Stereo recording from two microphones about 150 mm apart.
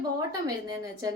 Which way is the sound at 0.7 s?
25° right (ahead or behind).